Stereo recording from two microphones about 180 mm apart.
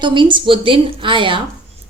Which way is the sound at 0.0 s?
25° right (ahead or behind).